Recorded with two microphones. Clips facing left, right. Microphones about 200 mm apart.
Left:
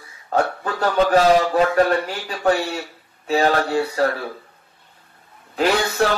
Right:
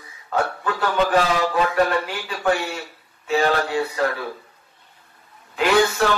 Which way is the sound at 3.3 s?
40° left (ahead or behind).